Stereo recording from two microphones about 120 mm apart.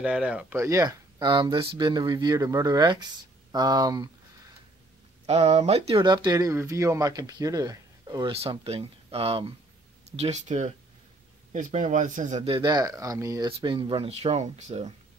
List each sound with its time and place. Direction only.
0.0 s speech: 10° right (ahead or behind)
0.6 s speech: 25° right (ahead or behind)
0.8 s speech: 40° right (ahead or behind)
5.2 s speech: 60° right (ahead or behind)
6.0 s speech: 40° right (ahead or behind)
8.3 s speech: 55° right (ahead or behind); by 10.7 s 75° right (ahead or behind)
11.5 s speech: 90° right
12.4 s speech: 40° right (ahead or behind)
13.5 s speech: 45° right (ahead or behind); by 14.9 s 70° right (ahead or behind)